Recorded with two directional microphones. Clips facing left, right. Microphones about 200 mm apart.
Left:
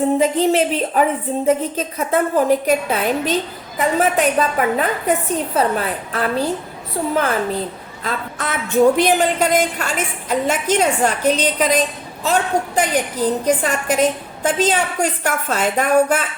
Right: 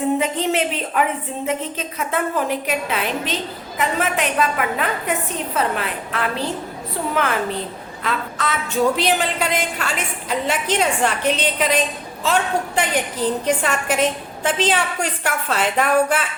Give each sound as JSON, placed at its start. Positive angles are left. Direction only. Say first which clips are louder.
{"t": 0.2, "sound": "a woman's voice", "louder": "left 5 dB", "side_deg": 35}
{"t": 8.0, "sound": "a woman's voice", "louder": "even", "side_deg": 50}